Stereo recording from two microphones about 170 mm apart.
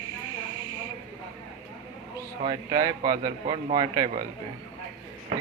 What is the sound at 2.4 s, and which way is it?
A man's voice, 25° right (ahead or behind).